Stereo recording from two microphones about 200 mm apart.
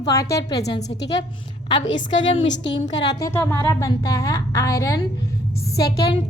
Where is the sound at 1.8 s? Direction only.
65° left (ahead or behind).